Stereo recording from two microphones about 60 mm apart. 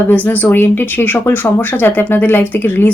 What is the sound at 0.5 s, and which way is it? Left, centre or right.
Speech, left.